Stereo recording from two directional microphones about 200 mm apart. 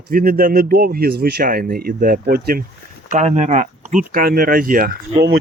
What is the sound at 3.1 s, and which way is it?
Speech, 35° right (ahead or behind).